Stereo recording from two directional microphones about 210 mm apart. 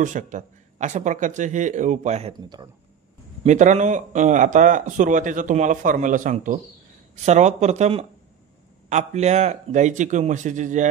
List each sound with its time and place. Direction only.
0.0 s speech: 35° right (ahead or behind)
3.4 s speech: 35° right (ahead or behind)